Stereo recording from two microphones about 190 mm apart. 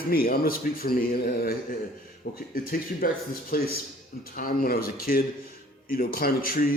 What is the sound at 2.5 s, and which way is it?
Speech, 50° left (ahead or behind).